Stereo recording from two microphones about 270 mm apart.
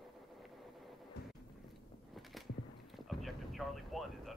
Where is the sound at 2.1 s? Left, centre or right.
Centre.